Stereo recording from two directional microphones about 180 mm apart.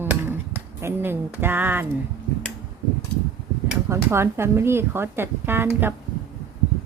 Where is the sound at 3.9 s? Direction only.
15° right (ahead or behind).